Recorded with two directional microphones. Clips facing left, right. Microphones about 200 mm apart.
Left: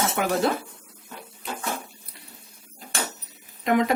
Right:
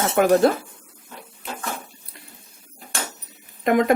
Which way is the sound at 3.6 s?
50° right (ahead or behind).